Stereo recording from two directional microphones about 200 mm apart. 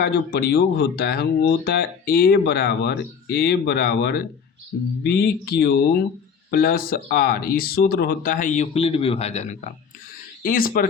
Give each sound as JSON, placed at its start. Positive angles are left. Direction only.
{"t": 0.0, "sound": "speech", "side_deg": 50}
{"t": 10.4, "sound": "speech", "side_deg": 45}